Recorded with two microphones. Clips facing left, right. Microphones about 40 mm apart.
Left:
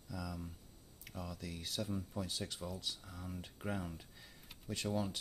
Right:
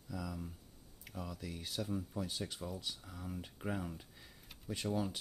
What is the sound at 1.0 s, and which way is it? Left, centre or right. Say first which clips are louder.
Speech: right 1 dB; centre.